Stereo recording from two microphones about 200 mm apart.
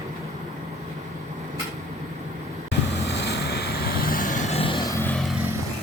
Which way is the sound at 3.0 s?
60° left (ahead or behind).